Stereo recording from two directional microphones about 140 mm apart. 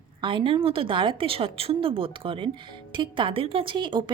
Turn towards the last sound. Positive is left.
turn(degrees=-35)  # may be behind; listen again after turning